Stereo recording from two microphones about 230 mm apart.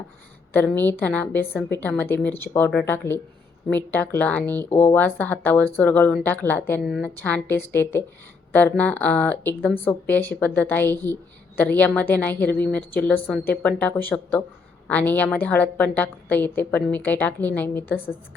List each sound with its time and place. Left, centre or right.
0.5 s speech: centre